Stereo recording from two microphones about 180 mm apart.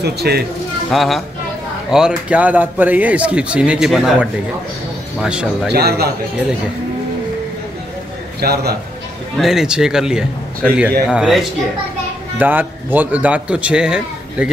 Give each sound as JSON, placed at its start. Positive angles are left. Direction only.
{"t": 0.0, "sound": "a man's voice", "side_deg": -65}
{"t": 0.9, "sound": "a man's voice", "side_deg": 0}
{"t": 5.7, "sound": "a man's voice", "side_deg": -60}
{"t": 8.4, "sound": "a man's voice", "side_deg": -60}
{"t": 9.4, "sound": "a man's voice", "side_deg": 0}